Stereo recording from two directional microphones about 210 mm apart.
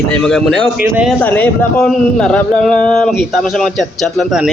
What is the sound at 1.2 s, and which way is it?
Speech, 10° left (ahead or behind).